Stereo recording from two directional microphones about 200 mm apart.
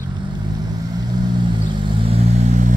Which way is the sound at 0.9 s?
20° right (ahead or behind).